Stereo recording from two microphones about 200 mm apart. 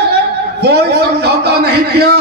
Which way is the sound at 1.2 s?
55° right (ahead or behind).